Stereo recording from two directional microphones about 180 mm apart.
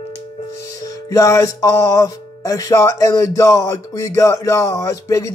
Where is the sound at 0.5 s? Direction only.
20° left (ahead or behind).